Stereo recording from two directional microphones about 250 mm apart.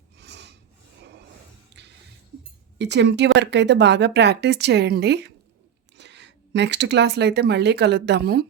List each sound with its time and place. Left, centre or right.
0.2 s rub: right
2.7 s speech: right